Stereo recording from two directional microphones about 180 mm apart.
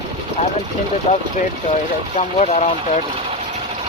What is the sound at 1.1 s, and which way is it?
Speech, 35° left (ahead or behind).